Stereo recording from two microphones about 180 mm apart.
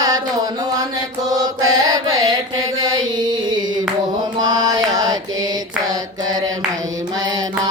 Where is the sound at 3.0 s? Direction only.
25° right (ahead or behind).